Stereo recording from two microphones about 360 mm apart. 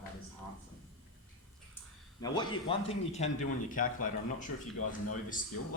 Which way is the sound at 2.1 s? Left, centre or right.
Centre.